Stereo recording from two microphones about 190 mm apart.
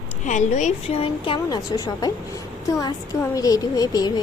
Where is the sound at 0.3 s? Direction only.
40° left (ahead or behind).